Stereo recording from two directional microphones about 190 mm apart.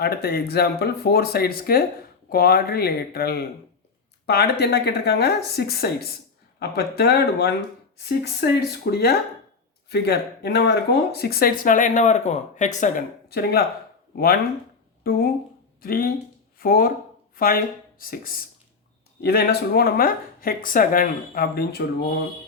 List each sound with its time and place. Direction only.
0.0 s speech: 55° left (ahead or behind); by 13.0 s 40° left (ahead or behind)
13.2 s speech: 55° left (ahead or behind)
15.0 s speech: 50° left (ahead or behind)